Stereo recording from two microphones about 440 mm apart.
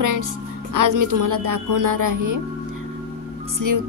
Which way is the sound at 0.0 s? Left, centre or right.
Right.